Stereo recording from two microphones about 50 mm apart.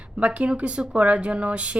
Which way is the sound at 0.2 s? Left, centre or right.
Right.